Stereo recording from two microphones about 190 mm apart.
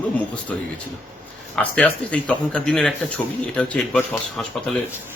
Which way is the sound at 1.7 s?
5° left (ahead or behind).